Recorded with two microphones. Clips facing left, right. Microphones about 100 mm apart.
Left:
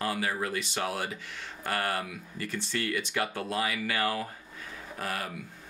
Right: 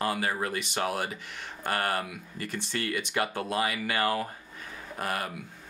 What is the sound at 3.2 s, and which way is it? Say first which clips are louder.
Speech: right 2 dB; 15° right (ahead or behind).